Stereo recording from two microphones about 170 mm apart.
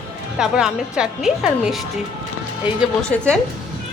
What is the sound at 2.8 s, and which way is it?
Speech, centre (ahead or behind).